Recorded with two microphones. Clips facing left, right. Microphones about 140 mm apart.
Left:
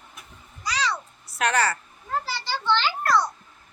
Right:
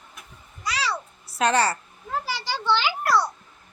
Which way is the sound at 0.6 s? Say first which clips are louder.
Left 1 dB; 5° right (ahead or behind).